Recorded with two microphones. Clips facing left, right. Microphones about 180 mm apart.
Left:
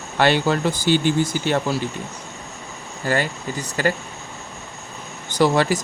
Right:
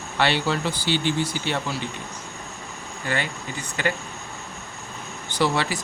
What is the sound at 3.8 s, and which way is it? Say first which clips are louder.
Speech: left 5 dB; 40° left (ahead or behind).